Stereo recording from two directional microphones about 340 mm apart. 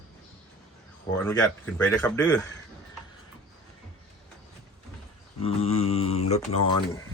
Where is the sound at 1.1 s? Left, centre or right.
Centre.